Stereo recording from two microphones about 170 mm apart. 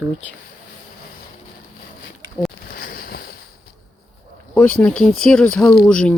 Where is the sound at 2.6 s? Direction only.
60° left (ahead or behind).